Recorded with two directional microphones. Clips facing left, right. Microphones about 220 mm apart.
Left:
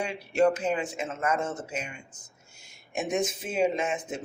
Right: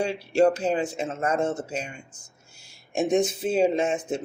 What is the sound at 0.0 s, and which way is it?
Speech, 30° right (ahead or behind).